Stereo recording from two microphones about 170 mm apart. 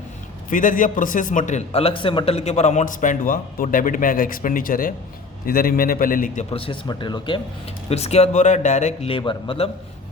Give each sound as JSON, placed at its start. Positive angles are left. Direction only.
{"t": 0.5, "sound": "a man's voice", "side_deg": 50}
{"t": 6.5, "sound": "speech", "side_deg": 30}
{"t": 7.9, "sound": "a man's voice", "side_deg": 40}